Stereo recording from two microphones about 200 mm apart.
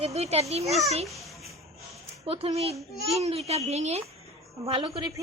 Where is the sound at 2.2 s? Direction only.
30° right (ahead or behind).